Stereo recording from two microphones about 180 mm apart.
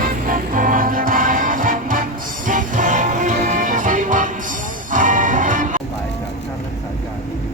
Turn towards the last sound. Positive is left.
turn(degrees=-45)  # may be behind; listen again after turning